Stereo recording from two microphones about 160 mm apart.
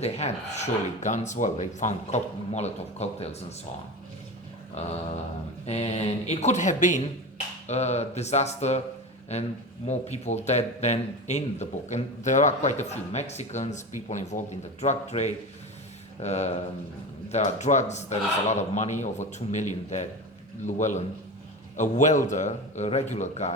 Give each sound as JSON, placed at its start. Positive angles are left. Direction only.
{"t": 0.0, "sound": "speech", "side_deg": 45}
{"t": 4.7, "sound": "speech", "side_deg": 45}